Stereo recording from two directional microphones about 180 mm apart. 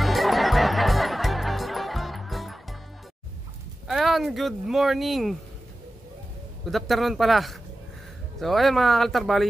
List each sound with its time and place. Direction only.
0.0 s music: centre (ahead or behind)
3.8 s speech: centre (ahead or behind)
6.6 s speech: centre (ahead or behind)